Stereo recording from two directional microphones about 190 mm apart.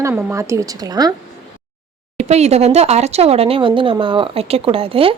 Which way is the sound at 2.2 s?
35° right (ahead or behind).